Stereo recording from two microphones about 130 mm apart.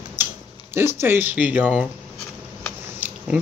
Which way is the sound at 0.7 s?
20° right (ahead or behind).